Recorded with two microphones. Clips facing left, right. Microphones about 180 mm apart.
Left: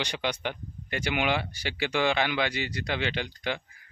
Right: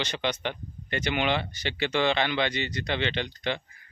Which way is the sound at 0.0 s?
10° left (ahead or behind).